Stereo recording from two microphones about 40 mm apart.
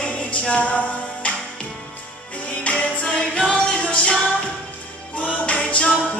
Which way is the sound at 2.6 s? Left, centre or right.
Left.